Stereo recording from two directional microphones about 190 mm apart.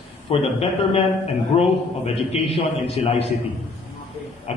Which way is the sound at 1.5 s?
25° left (ahead or behind).